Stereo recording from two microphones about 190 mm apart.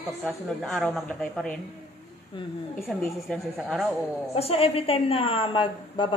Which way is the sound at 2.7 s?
Centre (ahead or behind).